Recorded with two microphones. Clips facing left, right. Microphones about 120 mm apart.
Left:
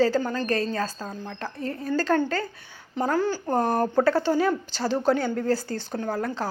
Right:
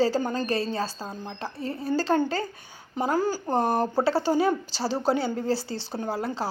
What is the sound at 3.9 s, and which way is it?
Speech, 35° right (ahead or behind).